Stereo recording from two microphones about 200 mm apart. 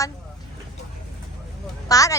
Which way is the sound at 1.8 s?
15° left (ahead or behind).